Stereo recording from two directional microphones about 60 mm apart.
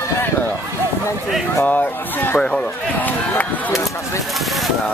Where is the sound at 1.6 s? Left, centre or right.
Left.